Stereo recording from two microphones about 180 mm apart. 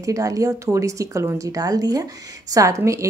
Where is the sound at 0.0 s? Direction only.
20° right (ahead or behind).